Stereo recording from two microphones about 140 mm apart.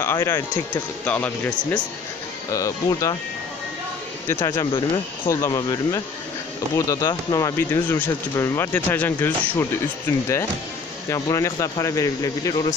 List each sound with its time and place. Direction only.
0.0 s speech: 15° left (ahead or behind)
2.5 s speech: 25° left (ahead or behind)
4.3 s speech: 20° left (ahead or behind)
4.7 s speech: 35° left (ahead or behind); by 9.7 s 15° left (ahead or behind)
11.1 s speech: 25° left (ahead or behind)